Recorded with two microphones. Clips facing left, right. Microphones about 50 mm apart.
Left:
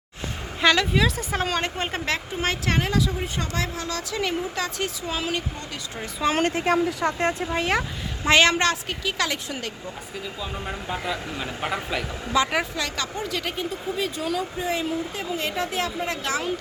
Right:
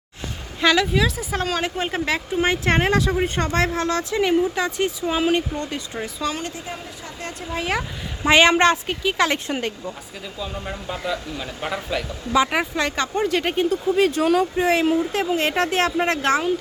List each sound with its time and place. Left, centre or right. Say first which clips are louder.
0.6 s a woman's voice: right 2 dB; centre
2.6 s speech: right 3 dB; right
4.2 s speech: right 7 dB; centre
6.3 s speech: left 7 dB; left
7.2 s speech: left 8 dB; left
7.5 s a woman's voice: left 1 dB; centre
8.2 s speech: right 4 dB; centre
10.4 s speech: right 3 dB; centre
12.3 s speech: right 3 dB; centre
12.7 s speech: right 6 dB; right
13.1 s speech: right 8 dB; right
13.6 s speech: right 12 dB; right